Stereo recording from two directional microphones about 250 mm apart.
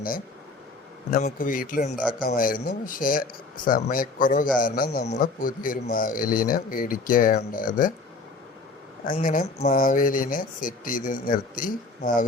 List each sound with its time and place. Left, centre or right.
1.1 s speech: left
9.0 s speech: left